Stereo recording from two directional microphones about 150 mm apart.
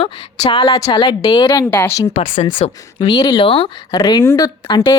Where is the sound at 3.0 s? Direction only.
30° left (ahead or behind).